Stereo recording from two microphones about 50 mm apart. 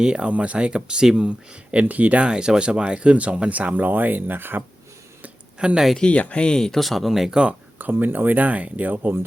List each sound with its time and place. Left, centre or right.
0.0 s speech: right
1.7 s speech: right
2.2 s speech: centre; by 4.6 s right
5.5 s speech: centre
6.0 s speech: left
6.6 s speech: centre
7.8 s speech: right